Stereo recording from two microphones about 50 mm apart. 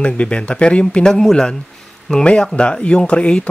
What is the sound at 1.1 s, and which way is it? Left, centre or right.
Speech, centre.